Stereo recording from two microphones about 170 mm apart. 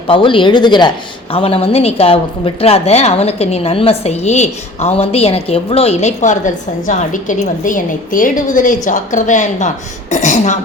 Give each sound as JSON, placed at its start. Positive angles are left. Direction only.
{"t": 0.1, "sound": "a woman's voice", "side_deg": 30}